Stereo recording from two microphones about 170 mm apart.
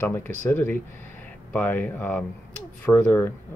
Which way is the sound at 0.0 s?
10° left (ahead or behind).